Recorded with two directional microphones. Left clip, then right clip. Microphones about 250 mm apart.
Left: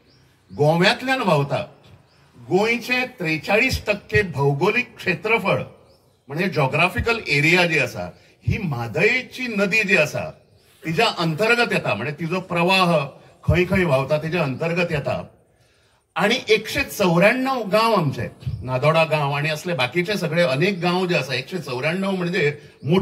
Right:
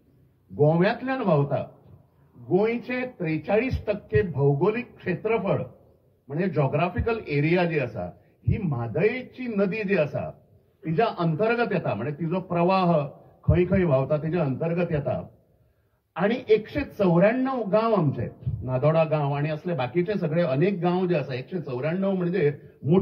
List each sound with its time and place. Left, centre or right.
0.6 s speech: centre